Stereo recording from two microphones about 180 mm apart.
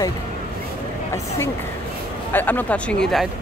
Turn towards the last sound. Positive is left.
turn(degrees=5)  # may be behind; listen again after turning